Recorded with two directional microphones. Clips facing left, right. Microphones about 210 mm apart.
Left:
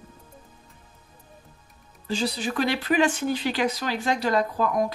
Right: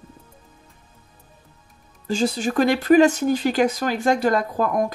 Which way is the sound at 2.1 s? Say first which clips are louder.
Right 5 dB; 45° right (ahead or behind).